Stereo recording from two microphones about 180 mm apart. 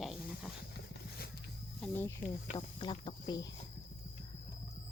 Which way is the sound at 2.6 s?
25° left (ahead or behind).